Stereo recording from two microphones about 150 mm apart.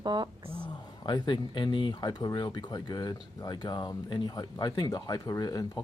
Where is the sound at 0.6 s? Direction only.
30° left (ahead or behind).